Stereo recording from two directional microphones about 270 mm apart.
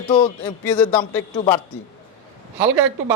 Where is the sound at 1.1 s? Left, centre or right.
Centre.